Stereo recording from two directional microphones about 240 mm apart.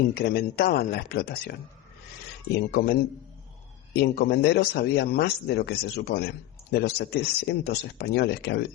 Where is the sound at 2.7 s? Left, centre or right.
Left.